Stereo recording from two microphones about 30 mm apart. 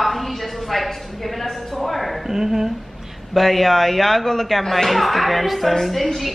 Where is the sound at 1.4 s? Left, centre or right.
Centre.